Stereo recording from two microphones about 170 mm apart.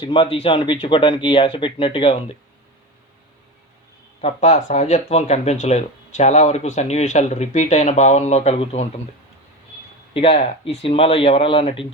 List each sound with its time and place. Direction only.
0.0 s speech: 30° left (ahead or behind)
4.2 s speech: 40° left (ahead or behind)
10.2 s speech: 35° left (ahead or behind)